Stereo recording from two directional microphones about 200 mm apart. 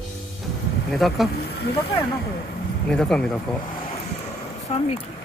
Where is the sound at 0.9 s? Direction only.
Centre (ahead or behind).